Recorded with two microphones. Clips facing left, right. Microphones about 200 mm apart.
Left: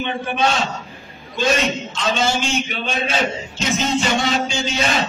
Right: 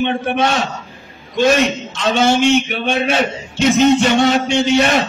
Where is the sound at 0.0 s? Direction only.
65° right (ahead or behind).